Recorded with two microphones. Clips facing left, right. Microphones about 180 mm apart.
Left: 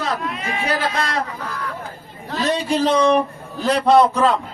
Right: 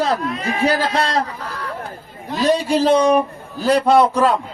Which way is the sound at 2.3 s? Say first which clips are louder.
Right 4 dB; 10° right (ahead or behind).